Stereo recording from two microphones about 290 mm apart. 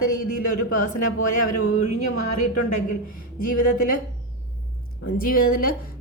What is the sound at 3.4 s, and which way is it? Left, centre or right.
Speech, left.